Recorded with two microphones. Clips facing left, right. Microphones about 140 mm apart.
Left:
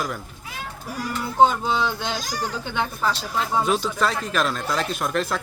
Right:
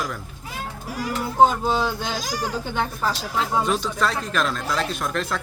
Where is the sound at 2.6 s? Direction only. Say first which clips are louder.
Even; 5° right (ahead or behind).